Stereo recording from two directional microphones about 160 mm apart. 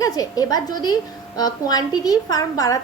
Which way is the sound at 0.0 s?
25° left (ahead or behind).